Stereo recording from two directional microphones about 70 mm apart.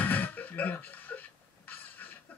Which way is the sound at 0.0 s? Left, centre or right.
Left.